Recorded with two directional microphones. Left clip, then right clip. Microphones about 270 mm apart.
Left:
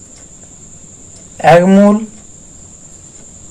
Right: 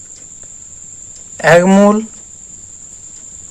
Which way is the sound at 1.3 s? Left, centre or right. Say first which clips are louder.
Left 1 dB; right.